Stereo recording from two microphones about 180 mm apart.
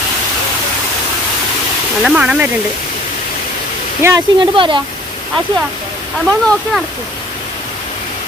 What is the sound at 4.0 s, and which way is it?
Speech, 20° right (ahead or behind).